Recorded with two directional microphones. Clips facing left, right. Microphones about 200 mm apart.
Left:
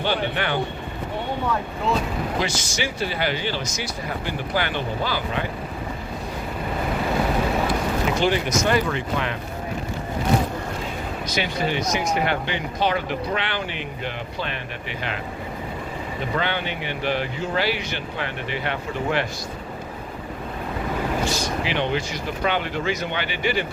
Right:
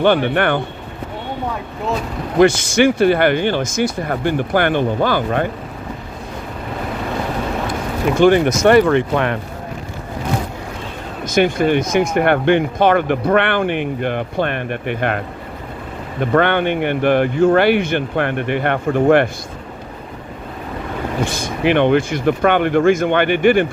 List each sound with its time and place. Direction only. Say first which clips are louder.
0.0 s speech: right 10 dB; 55° right (ahead or behind)
2.4 s speech: right 14 dB; 55° right (ahead or behind)
8.2 s speech: right 13 dB; 55° right (ahead or behind)
11.3 s speech: right 11 dB; 50° right (ahead or behind)
16.2 s speech: right 12 dB; 60° right (ahead or behind)
21.2 s speech: right 7 dB; 55° right (ahead or behind)